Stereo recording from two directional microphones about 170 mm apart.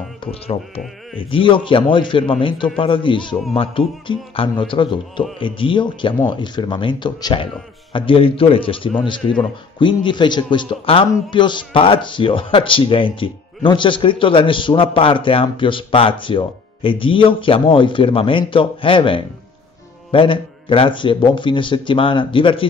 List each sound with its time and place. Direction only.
0.2 s a man's voice: 35° left (ahead or behind)